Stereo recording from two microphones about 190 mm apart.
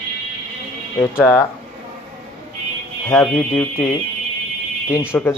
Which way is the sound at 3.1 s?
10° left (ahead or behind).